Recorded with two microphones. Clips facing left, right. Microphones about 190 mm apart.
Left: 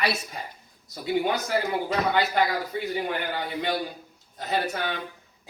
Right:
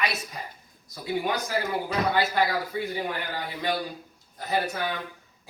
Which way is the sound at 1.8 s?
20° left (ahead or behind).